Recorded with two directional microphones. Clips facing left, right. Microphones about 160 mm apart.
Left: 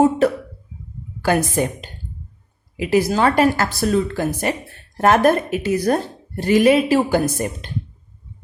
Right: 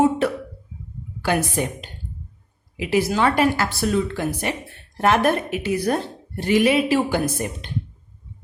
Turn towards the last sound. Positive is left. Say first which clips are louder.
# left 4 dB
turn(degrees=45)  # may be behind; listen again after turning